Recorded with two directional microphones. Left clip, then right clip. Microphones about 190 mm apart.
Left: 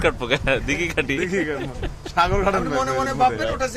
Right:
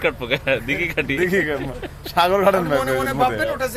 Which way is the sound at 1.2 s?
35° right (ahead or behind).